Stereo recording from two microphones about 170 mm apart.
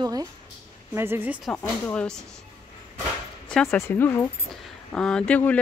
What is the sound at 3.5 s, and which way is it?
Speech, 5° left (ahead or behind).